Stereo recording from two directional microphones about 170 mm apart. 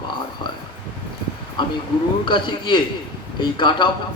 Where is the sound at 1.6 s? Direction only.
30° left (ahead or behind).